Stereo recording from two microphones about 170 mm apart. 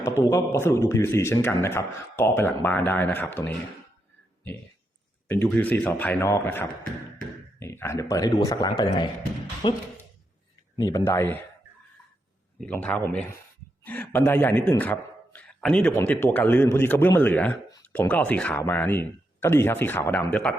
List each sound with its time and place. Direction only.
0.0 s a man's voice: 20° left (ahead or behind)
5.3 s a man's voice: 10° left (ahead or behind)
9.6 s speech: 30° left (ahead or behind)
10.8 s a man's voice: 20° left (ahead or behind)
12.5 s a man's voice: 5° left (ahead or behind)